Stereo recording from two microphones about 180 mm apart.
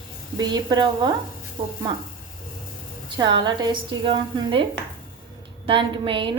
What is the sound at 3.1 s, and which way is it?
A woman's voice, 25° right (ahead or behind).